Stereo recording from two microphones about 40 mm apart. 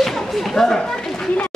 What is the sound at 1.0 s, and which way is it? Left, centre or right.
Chatter, centre.